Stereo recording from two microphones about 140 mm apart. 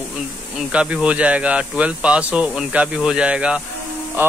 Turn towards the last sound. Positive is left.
turn(degrees=-15)  # may be behind; listen again after turning